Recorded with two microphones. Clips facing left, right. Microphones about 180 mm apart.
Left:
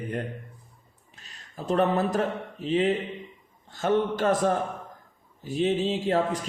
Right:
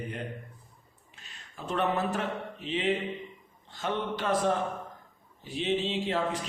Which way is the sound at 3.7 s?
45° left (ahead or behind).